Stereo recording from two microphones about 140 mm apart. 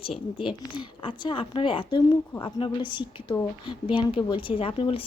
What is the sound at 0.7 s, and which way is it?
Speech, 35° left (ahead or behind).